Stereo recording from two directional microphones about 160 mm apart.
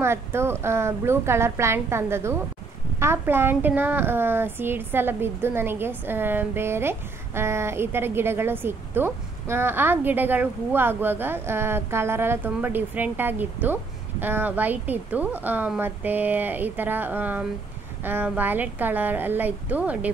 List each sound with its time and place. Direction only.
0.0 s a woman's voice: 15° right (ahead or behind)